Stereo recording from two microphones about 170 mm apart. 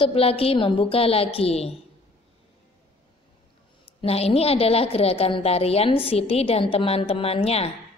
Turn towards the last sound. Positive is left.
turn(degrees=35)  # may be behind; listen again after turning